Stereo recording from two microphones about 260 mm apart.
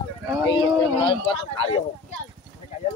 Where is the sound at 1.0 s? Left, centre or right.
Centre.